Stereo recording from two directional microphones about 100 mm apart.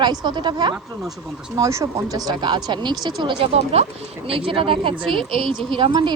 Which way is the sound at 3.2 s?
65° right (ahead or behind).